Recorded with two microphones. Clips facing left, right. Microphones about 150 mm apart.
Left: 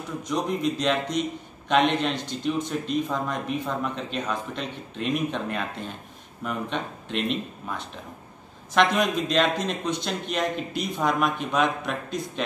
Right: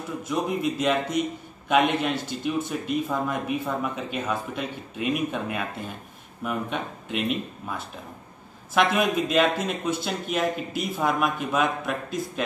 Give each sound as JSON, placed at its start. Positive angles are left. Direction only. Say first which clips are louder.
{"t": 0.2, "sound": "speech", "louder": "even", "side_deg": -5}